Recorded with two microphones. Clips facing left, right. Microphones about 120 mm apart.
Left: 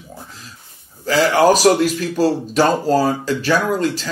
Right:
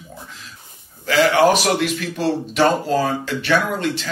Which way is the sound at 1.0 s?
40° left (ahead or behind).